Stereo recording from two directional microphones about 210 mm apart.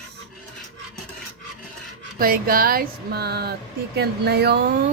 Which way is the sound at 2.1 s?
45° right (ahead or behind).